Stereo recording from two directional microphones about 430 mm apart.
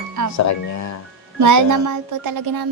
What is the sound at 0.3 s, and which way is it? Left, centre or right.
Speech, left.